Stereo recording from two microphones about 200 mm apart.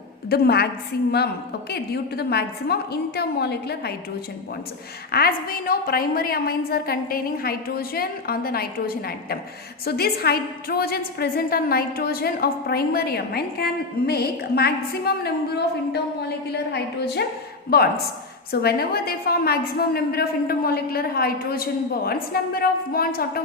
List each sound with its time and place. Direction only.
0.3 s a woman's voice: 50° left (ahead or behind)
5.1 s a woman's voice: 45° left (ahead or behind)